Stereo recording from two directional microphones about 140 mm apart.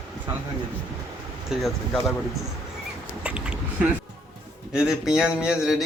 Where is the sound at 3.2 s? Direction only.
5° right (ahead or behind).